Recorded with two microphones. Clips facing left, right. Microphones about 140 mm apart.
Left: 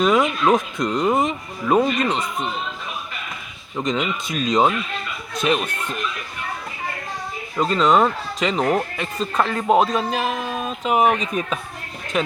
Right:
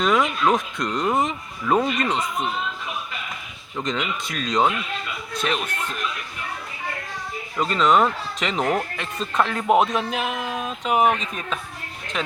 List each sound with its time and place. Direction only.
0.0 s speech: 10° left (ahead or behind)
3.9 s speech: 10° left (ahead or behind)
7.6 s speech: centre (ahead or behind)